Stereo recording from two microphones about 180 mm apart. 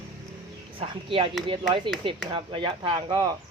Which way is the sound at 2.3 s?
30° right (ahead or behind).